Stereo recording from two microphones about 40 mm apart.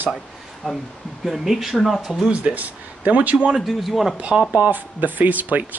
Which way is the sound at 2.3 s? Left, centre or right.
Right.